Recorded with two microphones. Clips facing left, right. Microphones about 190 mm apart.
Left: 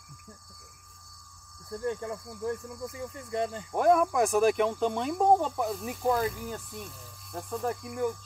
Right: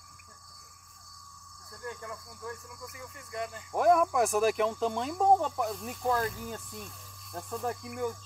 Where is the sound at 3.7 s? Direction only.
Centre (ahead or behind).